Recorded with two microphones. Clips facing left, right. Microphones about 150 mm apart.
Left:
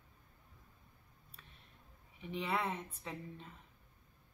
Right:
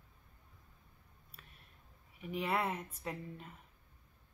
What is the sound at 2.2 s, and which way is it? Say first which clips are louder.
Speech: right 2 dB; 10° right (ahead or behind).